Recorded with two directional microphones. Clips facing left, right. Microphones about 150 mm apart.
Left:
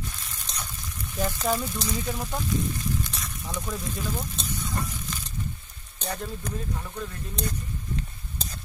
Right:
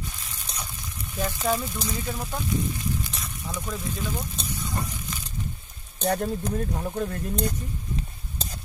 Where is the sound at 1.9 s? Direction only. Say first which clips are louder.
Left 1 dB; centre (ahead or behind).